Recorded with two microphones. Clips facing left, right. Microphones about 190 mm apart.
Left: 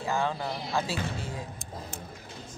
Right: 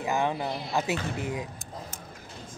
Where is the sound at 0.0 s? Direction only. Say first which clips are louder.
Right 2 dB; 15° right (ahead or behind).